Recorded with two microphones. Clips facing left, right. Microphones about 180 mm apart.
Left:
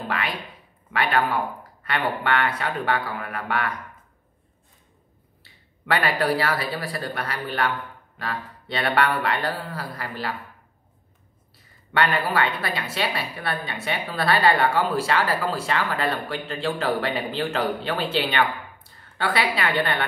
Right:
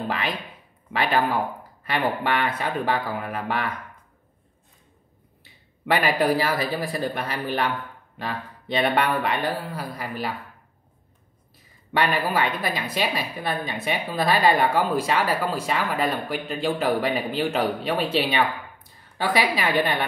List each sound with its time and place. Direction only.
0.9 s speech: 20° right (ahead or behind)
5.4 s a woman's voice: 20° right (ahead or behind)
11.9 s a woman's voice: 15° right (ahead or behind)